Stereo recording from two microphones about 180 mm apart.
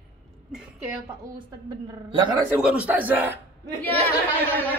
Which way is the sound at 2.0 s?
25° right (ahead or behind).